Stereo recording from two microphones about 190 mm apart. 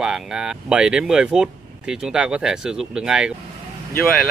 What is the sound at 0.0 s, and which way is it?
Speech, 5° right (ahead or behind).